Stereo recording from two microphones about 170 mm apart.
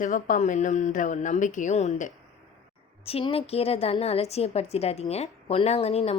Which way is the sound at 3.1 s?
35° left (ahead or behind).